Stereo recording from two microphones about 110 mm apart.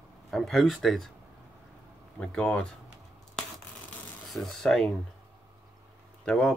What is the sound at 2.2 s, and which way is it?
Speech, 10° left (ahead or behind).